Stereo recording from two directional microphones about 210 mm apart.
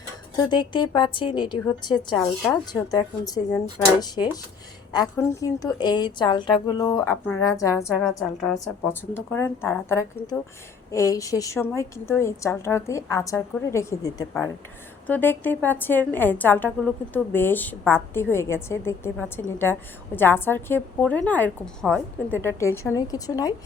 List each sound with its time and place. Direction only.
0.4 s a woman's voice: 20° left (ahead or behind)